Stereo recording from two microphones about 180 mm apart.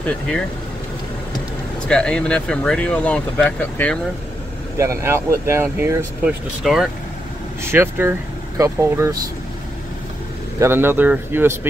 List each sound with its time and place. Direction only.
1.9 s speech: 5° left (ahead or behind)
4.7 s speech: 15° right (ahead or behind)
6.6 s speech: 5° right (ahead or behind)
7.7 s speech: 15° right (ahead or behind)
10.6 s speech: 10° right (ahead or behind)